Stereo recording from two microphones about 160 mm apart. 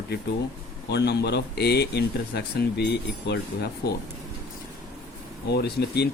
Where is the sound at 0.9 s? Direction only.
90° left.